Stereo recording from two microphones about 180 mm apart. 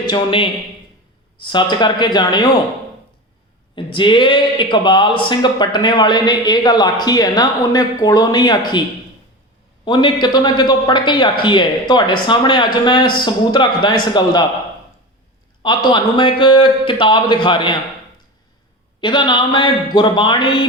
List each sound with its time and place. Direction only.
0.0 s a man's voice: 25° left (ahead or behind)
3.8 s speech: 25° left (ahead or behind)
9.8 s speech: 25° left (ahead or behind)
15.6 s speech: 25° left (ahead or behind)
18.9 s speech: 25° left (ahead or behind)